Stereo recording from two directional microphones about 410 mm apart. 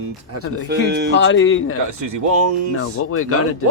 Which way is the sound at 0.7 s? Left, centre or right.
Right.